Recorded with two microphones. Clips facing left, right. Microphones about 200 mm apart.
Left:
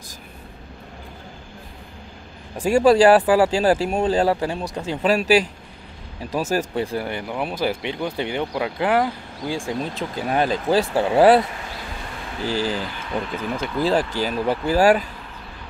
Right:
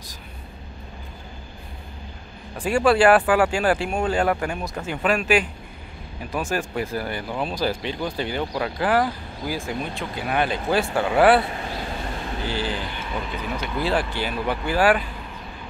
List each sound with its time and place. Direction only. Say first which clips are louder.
2.5 s speech: left 4 dB; 40° left (ahead or behind); by 9.7 s 15° left (ahead or behind)
9.7 s speech: left 3 dB; 40° left (ahead or behind)
12.4 s speech: left 5 dB; 40° left (ahead or behind)